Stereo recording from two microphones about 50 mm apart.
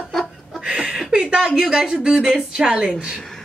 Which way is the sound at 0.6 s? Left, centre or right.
Centre.